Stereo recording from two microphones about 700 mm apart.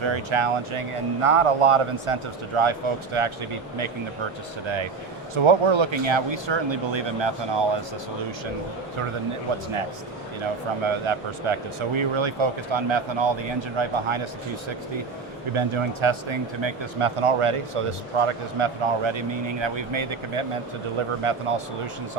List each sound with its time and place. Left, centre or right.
0.0 s speech: right
5.3 s speech: right
9.5 s speech: right
15.5 s speech: right